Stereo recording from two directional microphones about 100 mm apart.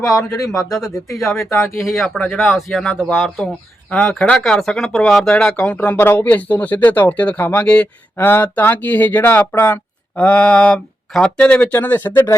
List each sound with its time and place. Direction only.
0.0 s speech: 10° left (ahead or behind)
0.3 s speech: 35° left (ahead or behind)
0.6 s speech: centre (ahead or behind)
3.9 s speech: 10° left (ahead or behind)